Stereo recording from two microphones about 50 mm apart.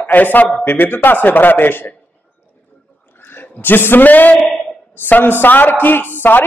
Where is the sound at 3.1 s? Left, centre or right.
Left.